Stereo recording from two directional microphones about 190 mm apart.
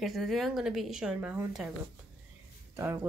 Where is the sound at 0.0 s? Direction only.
Centre (ahead or behind).